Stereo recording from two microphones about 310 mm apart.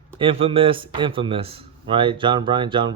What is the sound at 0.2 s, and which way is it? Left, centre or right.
Speech, centre.